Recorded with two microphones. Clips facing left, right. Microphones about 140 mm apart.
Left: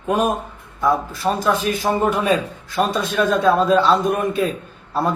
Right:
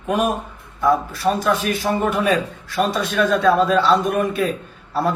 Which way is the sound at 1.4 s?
20° left (ahead or behind).